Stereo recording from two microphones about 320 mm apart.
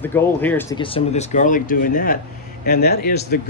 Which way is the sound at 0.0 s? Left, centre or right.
Centre.